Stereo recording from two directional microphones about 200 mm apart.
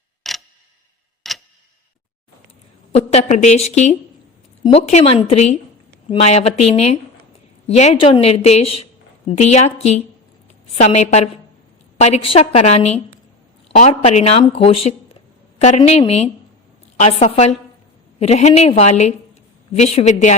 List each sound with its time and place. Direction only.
0.2 s clock: centre (ahead or behind)
1.2 s tick-tock: centre (ahead or behind)
2.9 s a woman's voice: 35° left (ahead or behind)